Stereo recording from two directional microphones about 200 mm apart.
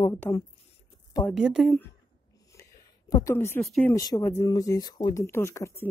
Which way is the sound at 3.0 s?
15° left (ahead or behind).